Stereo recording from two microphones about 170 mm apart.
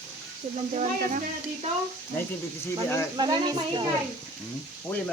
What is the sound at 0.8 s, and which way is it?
Speech, 45° right (ahead or behind).